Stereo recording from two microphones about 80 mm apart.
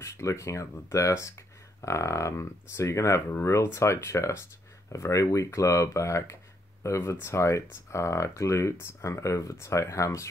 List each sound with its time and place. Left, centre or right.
0.0 s speech: left